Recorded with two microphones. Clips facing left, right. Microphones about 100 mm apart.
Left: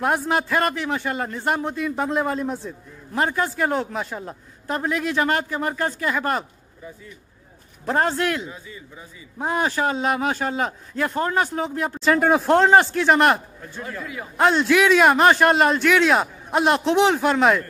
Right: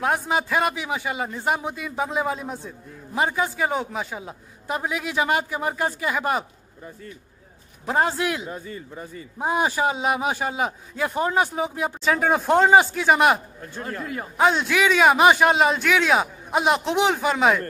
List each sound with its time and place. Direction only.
0.0 s a man's voice: centre (ahead or behind)
7.8 s a man's voice: 5° right (ahead or behind)
8.5 s a man's voice: 45° right (ahead or behind)
9.4 s a man's voice: 10° right (ahead or behind)
13.7 s a man's voice: 45° right (ahead or behind)
14.3 s a man's voice: centre (ahead or behind)